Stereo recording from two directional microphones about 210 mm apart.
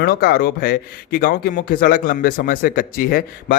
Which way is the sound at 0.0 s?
50° left (ahead or behind).